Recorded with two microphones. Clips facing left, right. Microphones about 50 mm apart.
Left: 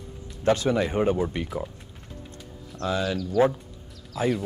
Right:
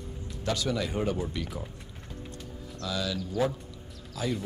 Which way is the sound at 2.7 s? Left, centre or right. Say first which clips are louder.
Left 6 dB; left.